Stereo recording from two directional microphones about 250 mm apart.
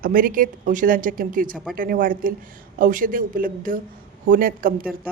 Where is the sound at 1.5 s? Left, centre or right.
Centre.